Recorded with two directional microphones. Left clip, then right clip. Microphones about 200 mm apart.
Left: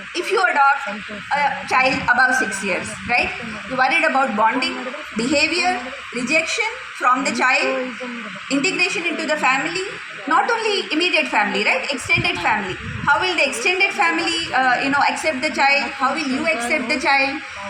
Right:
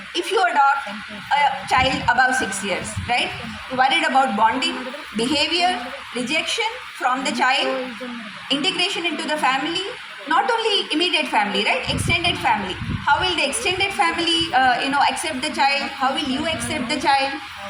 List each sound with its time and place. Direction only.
0.2 s a woman's voice: 30° right (ahead or behind)